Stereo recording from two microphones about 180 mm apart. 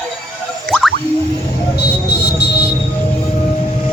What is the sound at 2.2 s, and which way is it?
Music, 65° left (ahead or behind).